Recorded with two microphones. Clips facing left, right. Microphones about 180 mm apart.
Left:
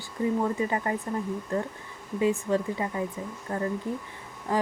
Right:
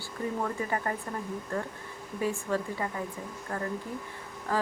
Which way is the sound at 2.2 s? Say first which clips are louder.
Left 5 dB; 15° left (ahead or behind).